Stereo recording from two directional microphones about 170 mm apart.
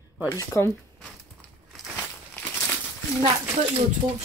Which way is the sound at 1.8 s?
Centre (ahead or behind).